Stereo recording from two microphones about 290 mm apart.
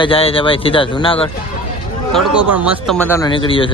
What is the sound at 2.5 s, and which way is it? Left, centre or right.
Speech, centre.